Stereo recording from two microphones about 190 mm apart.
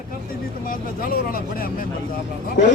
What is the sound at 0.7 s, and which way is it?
Speech, 50° left (ahead or behind).